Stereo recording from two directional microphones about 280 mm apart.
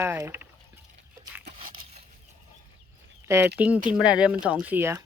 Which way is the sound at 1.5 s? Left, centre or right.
Right.